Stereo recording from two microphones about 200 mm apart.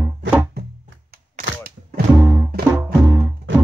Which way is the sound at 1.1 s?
45° right (ahead or behind).